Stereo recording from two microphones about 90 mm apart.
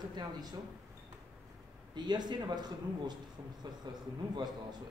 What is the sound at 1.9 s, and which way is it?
A man's voice, 50° right (ahead or behind).